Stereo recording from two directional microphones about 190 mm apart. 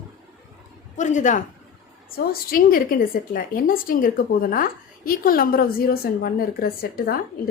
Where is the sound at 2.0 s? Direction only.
50° left (ahead or behind).